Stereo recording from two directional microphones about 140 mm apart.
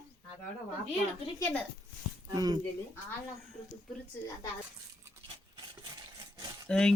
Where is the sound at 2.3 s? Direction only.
30° right (ahead or behind).